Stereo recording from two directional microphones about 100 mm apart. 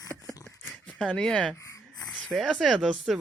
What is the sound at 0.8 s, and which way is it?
Speech, 10° left (ahead or behind).